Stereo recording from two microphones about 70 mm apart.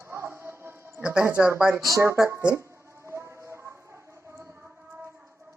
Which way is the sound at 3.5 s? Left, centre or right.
Right.